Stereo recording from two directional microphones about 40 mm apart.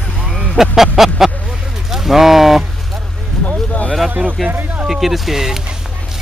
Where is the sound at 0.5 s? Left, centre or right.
Centre.